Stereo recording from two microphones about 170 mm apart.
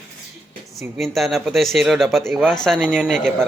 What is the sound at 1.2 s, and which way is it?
Speech, centre (ahead or behind).